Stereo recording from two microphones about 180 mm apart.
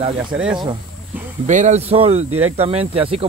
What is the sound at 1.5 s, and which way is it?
Speech, 40° right (ahead or behind).